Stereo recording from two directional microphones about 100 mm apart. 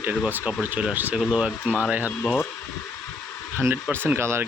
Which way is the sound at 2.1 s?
15° left (ahead or behind).